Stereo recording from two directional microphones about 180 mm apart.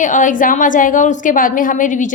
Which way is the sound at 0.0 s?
45° left (ahead or behind).